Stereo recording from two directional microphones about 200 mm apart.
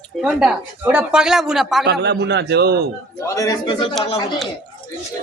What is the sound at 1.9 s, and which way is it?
Speech, 55° right (ahead or behind).